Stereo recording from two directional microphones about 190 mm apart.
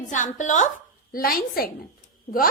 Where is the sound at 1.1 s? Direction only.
50° left (ahead or behind).